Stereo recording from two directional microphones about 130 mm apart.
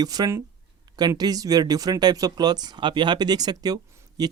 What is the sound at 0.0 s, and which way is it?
Speech, 30° right (ahead or behind).